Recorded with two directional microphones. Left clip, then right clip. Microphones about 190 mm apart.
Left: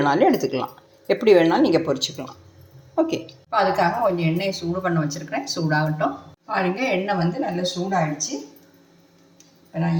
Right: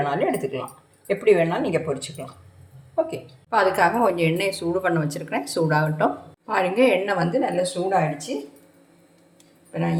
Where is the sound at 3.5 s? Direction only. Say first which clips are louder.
Right 1 dB; 45° right (ahead or behind).